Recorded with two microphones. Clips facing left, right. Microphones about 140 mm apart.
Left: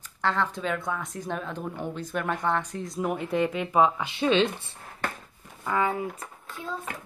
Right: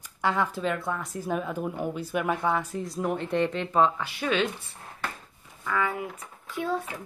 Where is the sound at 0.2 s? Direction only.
10° right (ahead or behind); by 4.1 s 10° left (ahead or behind).